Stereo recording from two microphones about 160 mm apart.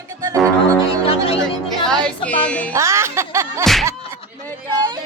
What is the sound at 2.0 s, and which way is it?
Music, 5° left (ahead or behind).